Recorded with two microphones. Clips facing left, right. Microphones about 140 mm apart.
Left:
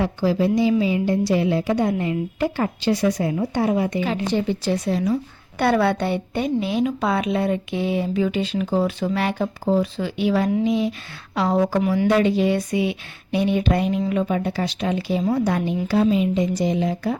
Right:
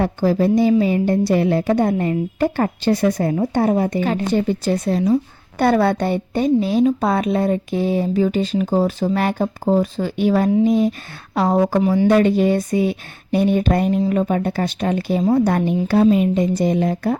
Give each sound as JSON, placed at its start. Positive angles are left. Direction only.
{"t": 0.0, "sound": "a woman's voice", "side_deg": -50}
{"t": 11.8, "sound": "speech", "side_deg": -30}
{"t": 12.0, "sound": "a woman's voice", "side_deg": -50}